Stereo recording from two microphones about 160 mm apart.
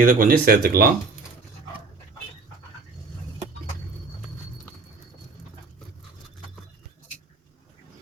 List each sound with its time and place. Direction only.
0.0 s speech: 60° right (ahead or behind)